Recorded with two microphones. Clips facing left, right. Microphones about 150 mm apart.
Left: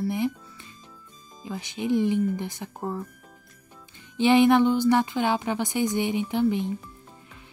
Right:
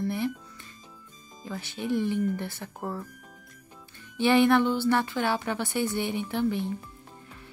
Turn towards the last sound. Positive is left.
turn(degrees=15)  # may be behind; listen again after turning